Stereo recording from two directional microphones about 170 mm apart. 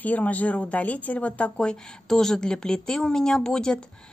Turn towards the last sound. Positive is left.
turn(degrees=5)  # may be behind; listen again after turning